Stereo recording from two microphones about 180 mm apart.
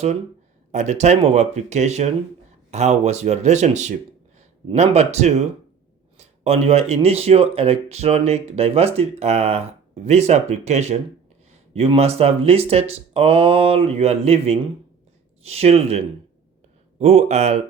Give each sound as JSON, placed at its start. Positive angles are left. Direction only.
{"t": 0.7, "sound": "speech", "side_deg": -40}
{"t": 17.0, "sound": "speech", "side_deg": -35}